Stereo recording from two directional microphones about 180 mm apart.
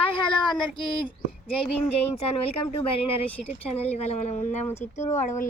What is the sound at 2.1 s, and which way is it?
Speech, 35° left (ahead or behind).